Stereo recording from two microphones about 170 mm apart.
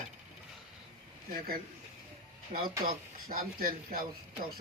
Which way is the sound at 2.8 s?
60° right (ahead or behind).